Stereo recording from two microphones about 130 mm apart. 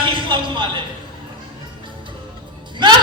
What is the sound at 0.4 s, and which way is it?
Speech, 40° right (ahead or behind).